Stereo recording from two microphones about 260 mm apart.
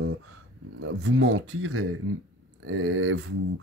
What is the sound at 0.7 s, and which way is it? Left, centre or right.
Speech, right.